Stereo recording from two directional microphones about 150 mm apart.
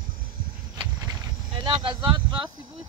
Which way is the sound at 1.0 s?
30° right (ahead or behind).